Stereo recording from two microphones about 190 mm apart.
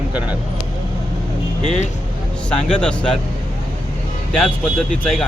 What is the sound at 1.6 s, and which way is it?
Speech, 40° left (ahead or behind).